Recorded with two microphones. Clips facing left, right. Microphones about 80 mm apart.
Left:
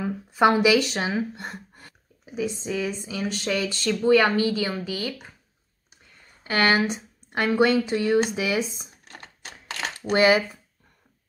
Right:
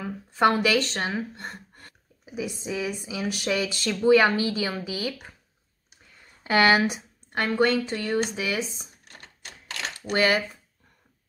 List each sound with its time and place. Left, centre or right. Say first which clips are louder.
0.0 s a woman's voice: left 2 dB; centre
2.2 s speech: left 3 dB; centre
6.5 s speech: right 2 dB; centre
7.3 s speech: left 2 dB; centre
10.1 s speech: left 4 dB; centre